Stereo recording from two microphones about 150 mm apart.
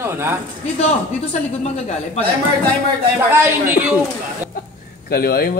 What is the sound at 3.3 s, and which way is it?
Speech, 15° right (ahead or behind).